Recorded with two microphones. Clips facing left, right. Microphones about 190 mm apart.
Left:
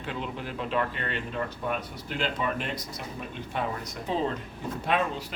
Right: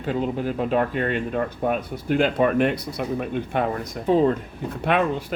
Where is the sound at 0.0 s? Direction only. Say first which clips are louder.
Right 10 dB; 40° right (ahead or behind).